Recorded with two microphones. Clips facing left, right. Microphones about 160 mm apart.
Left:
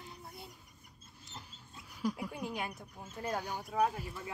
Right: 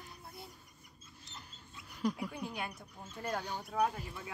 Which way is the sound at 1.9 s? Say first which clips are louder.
Right 1 dB; 5° left (ahead or behind).